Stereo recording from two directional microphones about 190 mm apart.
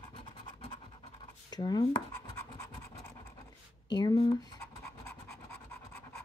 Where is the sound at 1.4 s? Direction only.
20° left (ahead or behind).